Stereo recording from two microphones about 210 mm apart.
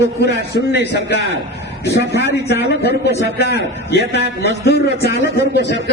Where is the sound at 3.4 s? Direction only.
50° left (ahead or behind).